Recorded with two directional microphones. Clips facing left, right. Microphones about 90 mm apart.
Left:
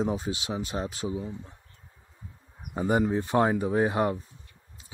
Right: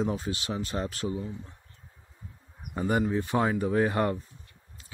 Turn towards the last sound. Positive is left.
turn(degrees=15)  # may be behind; listen again after turning